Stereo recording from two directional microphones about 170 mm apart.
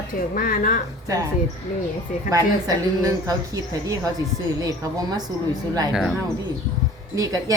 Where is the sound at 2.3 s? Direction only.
20° right (ahead or behind).